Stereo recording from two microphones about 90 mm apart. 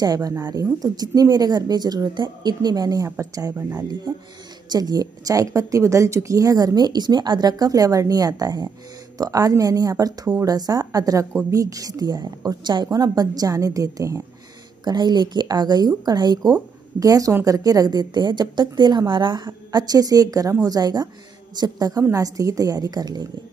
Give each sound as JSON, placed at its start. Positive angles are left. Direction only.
{"t": 0.0, "sound": "a woman's voice", "side_deg": -45}
{"t": 4.1, "sound": "a woman's voice", "side_deg": -55}
{"t": 14.9, "sound": "a woman's voice", "side_deg": -50}